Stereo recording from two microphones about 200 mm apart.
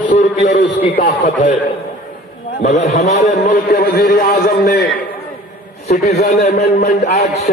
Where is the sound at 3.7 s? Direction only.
55° left (ahead or behind).